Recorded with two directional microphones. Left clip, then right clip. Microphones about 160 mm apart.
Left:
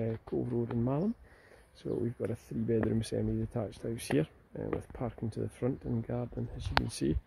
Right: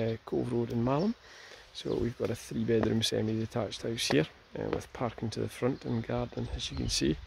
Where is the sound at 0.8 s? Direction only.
10° right (ahead or behind).